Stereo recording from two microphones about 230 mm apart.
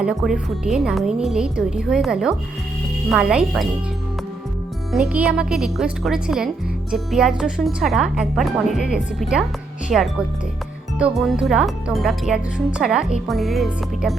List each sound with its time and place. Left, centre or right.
0.0 s speech: centre
4.9 s speech: centre